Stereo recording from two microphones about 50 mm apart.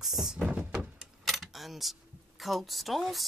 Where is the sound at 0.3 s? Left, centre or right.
Centre.